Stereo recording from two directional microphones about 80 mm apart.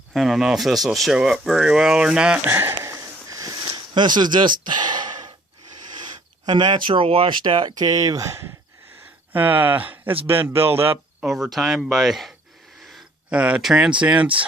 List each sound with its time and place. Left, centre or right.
0.1 s speech: centre
2.5 s speech: right
2.8 s sniff: right
5.9 s speech: right
9.3 s speech: right
11.2 s speech: centre
13.3 s speech: centre